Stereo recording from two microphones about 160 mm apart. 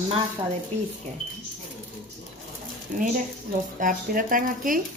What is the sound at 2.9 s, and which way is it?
Speech, 50° right (ahead or behind).